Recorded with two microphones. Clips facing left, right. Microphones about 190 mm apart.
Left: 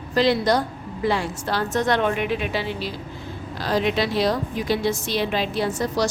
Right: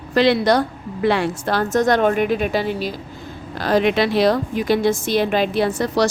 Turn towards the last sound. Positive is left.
turn(degrees=-65)  # may be behind; listen again after turning